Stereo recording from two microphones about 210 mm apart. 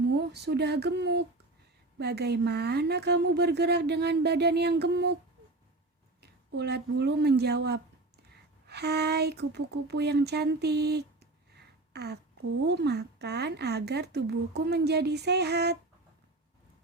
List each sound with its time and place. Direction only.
0.1 s speech: 50° right (ahead or behind)
6.5 s speech: 50° right (ahead or behind)